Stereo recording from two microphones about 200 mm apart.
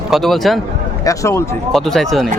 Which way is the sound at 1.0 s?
15° left (ahead or behind).